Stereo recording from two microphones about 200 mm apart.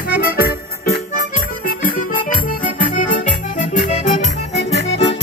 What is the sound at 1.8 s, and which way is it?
Music, 45° left (ahead or behind).